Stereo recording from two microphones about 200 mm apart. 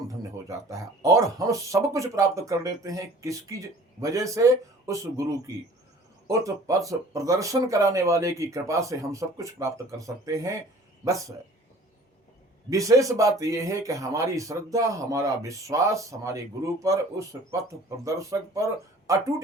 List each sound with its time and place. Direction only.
0.2 s speech: 15° right (ahead or behind)
6.2 s speech: 15° right (ahead or behind)
12.7 s speech: 15° right (ahead or behind)